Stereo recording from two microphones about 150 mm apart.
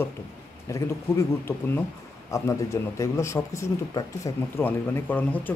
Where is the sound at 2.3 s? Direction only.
20° left (ahead or behind).